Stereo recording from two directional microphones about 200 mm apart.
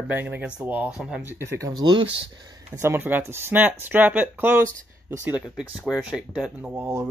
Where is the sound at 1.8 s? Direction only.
20° right (ahead or behind).